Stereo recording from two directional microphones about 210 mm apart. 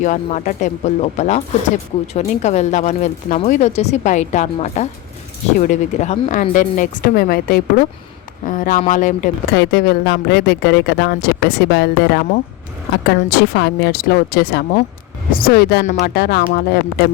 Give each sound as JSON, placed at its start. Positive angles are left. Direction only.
{"t": 0.0, "sound": "speech", "side_deg": 35}
{"t": 9.6, "sound": "speech", "side_deg": 50}